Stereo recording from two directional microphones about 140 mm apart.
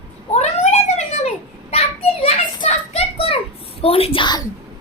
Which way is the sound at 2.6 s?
45° left (ahead or behind).